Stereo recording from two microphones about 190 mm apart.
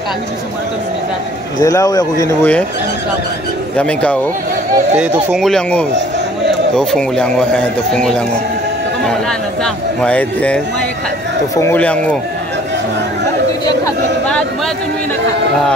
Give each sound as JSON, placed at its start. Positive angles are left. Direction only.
{"t": 1.6, "sound": "speech", "side_deg": 20}
{"t": 3.7, "sound": "speech", "side_deg": 5}
{"t": 4.9, "sound": "speech", "side_deg": -5}
{"t": 10.0, "sound": "speech", "side_deg": 5}